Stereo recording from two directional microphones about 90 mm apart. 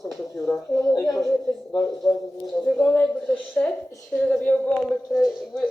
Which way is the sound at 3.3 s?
15° left (ahead or behind).